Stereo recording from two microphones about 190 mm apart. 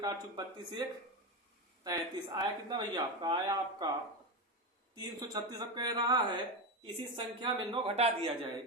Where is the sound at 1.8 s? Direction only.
20° right (ahead or behind).